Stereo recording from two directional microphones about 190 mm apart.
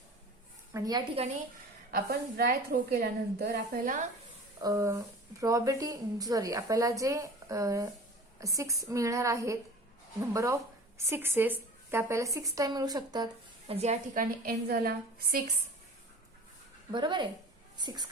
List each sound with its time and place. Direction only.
0.7 s a woman's voice: 20° right (ahead or behind)
1.9 s a woman's voice: 55° right (ahead or behind)
4.6 s a woman's voice: 15° right (ahead or behind)
13.7 s a woman's voice: 35° right (ahead or behind); by 15.4 s 50° right (ahead or behind)
16.9 s a woman's voice: 25° right (ahead or behind)